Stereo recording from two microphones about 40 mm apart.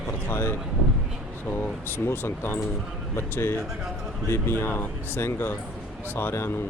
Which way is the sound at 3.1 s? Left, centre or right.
Left.